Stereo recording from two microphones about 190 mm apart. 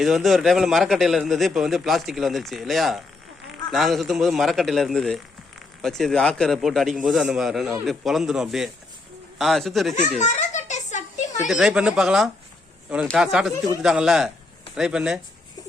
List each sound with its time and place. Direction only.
0.0 s a man's voice: centre (ahead or behind)
9.9 s a sound: 40° left (ahead or behind)
11.4 s a man's voice: 5° right (ahead or behind)